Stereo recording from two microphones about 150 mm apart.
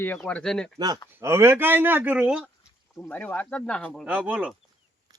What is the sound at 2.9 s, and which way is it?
Speech, 10° left (ahead or behind).